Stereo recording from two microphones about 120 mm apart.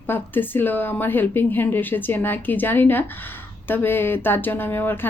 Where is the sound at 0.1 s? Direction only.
15° left (ahead or behind).